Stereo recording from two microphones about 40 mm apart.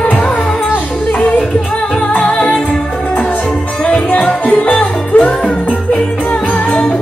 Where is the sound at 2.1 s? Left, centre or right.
Left.